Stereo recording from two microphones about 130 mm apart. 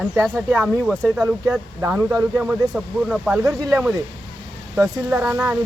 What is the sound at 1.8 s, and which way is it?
Speech, 15° right (ahead or behind).